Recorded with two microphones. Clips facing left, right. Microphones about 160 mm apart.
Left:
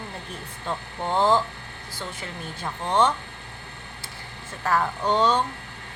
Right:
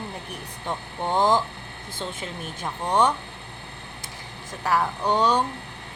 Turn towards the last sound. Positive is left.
turn(degrees=-15)  # may be behind; listen again after turning